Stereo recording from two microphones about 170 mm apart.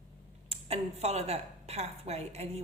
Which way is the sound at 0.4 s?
35° right (ahead or behind).